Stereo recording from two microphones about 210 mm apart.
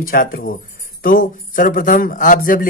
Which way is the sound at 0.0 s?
45° left (ahead or behind).